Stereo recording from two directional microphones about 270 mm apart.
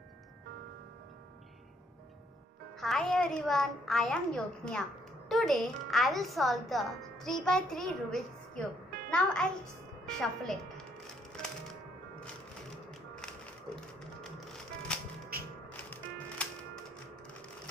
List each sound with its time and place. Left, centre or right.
2.8 s a woman's voice: centre
14.9 s music: centre